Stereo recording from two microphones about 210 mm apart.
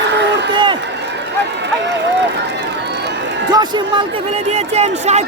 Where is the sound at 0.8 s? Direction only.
55° right (ahead or behind).